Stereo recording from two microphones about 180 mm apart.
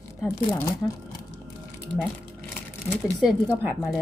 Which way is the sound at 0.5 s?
20° left (ahead or behind).